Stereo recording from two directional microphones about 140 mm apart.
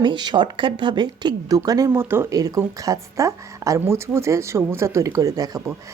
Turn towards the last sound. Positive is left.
turn(degrees=-25)  # may be behind; listen again after turning